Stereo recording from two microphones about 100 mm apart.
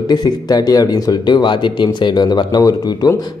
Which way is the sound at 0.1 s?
40° left (ahead or behind).